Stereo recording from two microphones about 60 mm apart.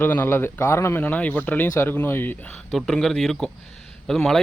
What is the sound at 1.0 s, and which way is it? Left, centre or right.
A man's voice, left.